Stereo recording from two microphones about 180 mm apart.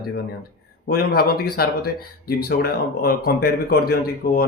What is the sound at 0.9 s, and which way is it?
Speech, 60° left (ahead or behind).